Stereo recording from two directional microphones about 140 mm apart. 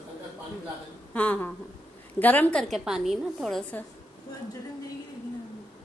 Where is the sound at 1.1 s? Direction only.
10° left (ahead or behind).